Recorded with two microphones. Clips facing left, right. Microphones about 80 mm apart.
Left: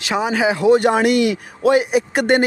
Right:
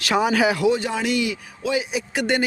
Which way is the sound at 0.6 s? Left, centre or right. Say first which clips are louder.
Left 7 dB; left.